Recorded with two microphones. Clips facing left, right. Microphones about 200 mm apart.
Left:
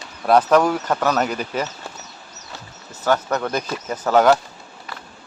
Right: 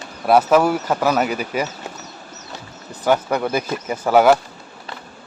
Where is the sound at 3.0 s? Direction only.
10° right (ahead or behind).